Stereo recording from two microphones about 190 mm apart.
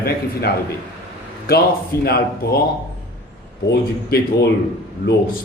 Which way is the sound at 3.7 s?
60° left (ahead or behind).